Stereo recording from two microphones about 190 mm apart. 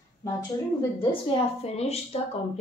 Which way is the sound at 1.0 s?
30° left (ahead or behind).